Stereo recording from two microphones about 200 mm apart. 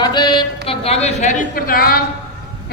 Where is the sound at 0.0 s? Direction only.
20° left (ahead or behind).